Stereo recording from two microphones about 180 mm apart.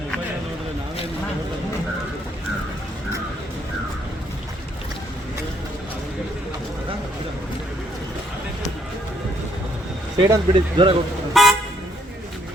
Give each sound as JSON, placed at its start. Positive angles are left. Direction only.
{"t": 10.2, "sound": "speech", "side_deg": -20}
{"t": 11.3, "sound": "vehicle", "side_deg": 0}